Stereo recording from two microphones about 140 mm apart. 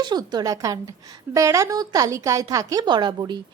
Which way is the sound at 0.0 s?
30° right (ahead or behind).